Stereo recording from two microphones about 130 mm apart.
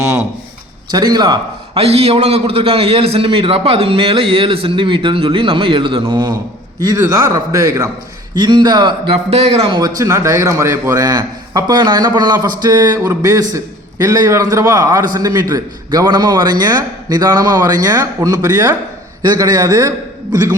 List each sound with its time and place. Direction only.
0.9 s a man's voice: 30° right (ahead or behind)
7.3 s a man's voice: 25° right (ahead or behind)